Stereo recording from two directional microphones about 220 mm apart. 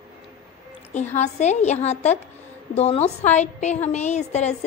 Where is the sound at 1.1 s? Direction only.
30° left (ahead or behind).